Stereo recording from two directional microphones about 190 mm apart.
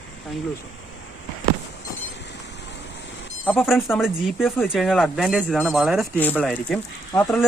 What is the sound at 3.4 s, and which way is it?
Speech, centre (ahead or behind).